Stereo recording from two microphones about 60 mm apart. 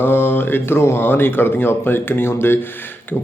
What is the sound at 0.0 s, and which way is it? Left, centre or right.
Speech, left.